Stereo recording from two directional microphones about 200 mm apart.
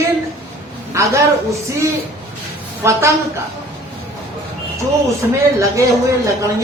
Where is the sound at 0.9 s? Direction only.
15° right (ahead or behind).